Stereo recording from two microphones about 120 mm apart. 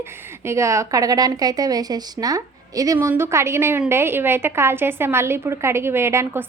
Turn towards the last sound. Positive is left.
turn(degrees=-20)  # may be behind; listen again after turning